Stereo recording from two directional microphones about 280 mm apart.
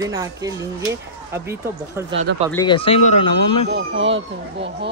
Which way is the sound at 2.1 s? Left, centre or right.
Right.